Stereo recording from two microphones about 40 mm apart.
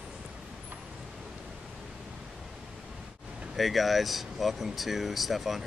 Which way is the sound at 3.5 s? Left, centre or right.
Centre.